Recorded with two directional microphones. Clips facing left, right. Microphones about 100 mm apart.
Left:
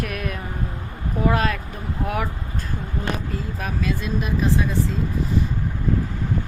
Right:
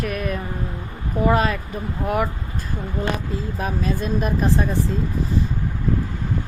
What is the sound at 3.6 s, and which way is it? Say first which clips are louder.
Speech: right 2 dB; 35° right (ahead or behind).